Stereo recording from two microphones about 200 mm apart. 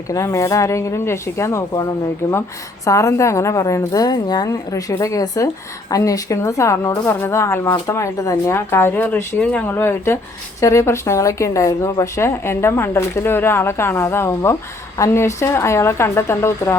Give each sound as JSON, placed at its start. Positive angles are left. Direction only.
{"t": 0.1, "sound": "speech", "side_deg": 15}
{"t": 2.8, "sound": "speech", "side_deg": 15}